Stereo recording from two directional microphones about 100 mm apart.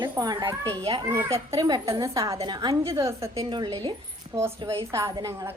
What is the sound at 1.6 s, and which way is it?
Speech, 40° right (ahead or behind).